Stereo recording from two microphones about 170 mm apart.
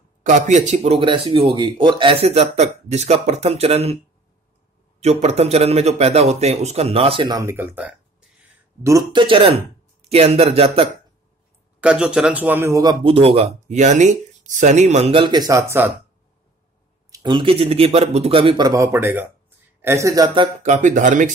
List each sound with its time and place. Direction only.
0.2 s speech: 45° right (ahead or behind)
5.0 s speech: 40° right (ahead or behind); by 8.3 s 10° right (ahead or behind)
8.8 s speech: 25° right (ahead or behind)
11.8 s speech: 5° right (ahead or behind)
13.0 s speech: 35° right (ahead or behind); by 15.9 s 15° right (ahead or behind)
17.1 s speech: 25° right (ahead or behind)
18.7 s speech: 15° right (ahead or behind)
20.6 s speech: 45° right (ahead or behind)